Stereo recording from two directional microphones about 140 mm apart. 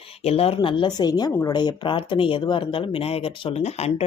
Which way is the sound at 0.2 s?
45° left (ahead or behind).